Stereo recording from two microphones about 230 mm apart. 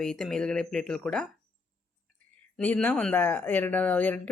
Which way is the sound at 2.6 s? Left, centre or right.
Centre.